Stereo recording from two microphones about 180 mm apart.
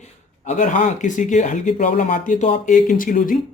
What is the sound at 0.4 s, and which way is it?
Speech, 45° left (ahead or behind).